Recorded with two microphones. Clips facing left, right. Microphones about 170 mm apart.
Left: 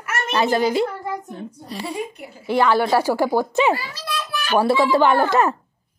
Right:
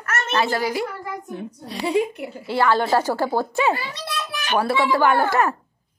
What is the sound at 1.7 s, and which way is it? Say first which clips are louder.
Speech: right 7 dB; 65° right (ahead or behind).